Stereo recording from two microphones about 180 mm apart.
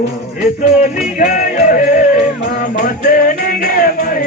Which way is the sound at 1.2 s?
50° left (ahead or behind).